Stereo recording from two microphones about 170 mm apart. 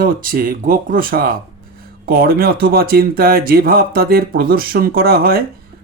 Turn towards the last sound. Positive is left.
turn(degrees=-65)  # may be behind; listen again after turning